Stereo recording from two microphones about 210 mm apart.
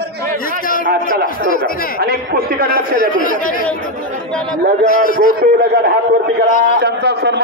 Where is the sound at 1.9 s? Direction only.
45° right (ahead or behind).